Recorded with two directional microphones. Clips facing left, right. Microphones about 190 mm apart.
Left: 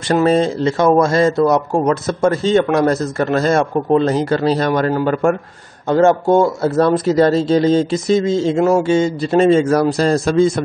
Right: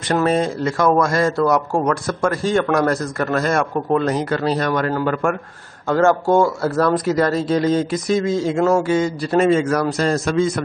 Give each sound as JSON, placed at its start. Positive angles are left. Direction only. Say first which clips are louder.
{"t": 0.1, "sound": "speech", "louder": "left 4 dB", "side_deg": 30}
{"t": 5.9, "sound": "speech", "louder": "left 3 dB", "side_deg": 20}